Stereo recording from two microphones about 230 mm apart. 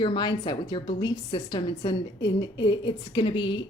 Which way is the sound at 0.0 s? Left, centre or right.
Centre.